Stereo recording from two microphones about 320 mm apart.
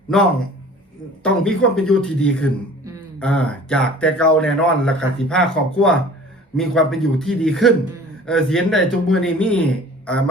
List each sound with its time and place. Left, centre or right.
1.2 s speech: centre